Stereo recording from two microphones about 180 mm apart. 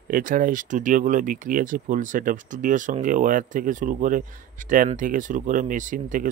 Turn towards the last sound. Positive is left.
turn(degrees=-45)  # may be behind; listen again after turning